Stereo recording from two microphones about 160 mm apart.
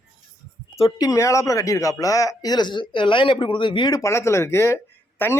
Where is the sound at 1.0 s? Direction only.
20° left (ahead or behind).